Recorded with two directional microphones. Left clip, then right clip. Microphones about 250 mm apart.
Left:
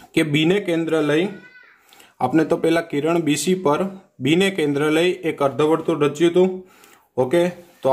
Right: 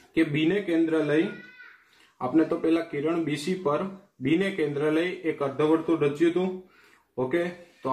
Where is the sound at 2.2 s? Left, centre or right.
Left.